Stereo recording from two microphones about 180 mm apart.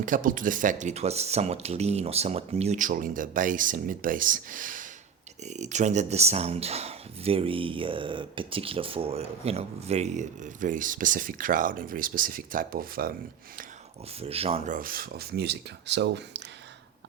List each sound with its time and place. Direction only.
0.0 s speech: 50° right (ahead or behind)
14.2 s speech: 35° right (ahead or behind); by 16.4 s 75° right (ahead or behind)